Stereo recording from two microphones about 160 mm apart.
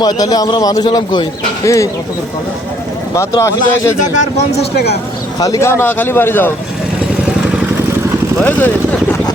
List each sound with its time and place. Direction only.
0.0 s a man's voice: 25° left (ahead or behind)
3.2 s speech: 15° left (ahead or behind)
5.4 s speech: 20° left (ahead or behind)
8.4 s speech: 10° left (ahead or behind)